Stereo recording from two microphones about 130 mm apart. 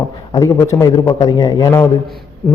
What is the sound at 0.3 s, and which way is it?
A man's voice, 25° left (ahead or behind).